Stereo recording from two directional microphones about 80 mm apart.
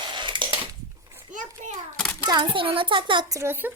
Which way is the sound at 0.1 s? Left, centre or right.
Right.